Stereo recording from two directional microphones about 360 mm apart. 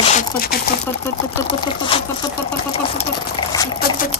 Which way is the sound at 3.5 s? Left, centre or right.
Centre.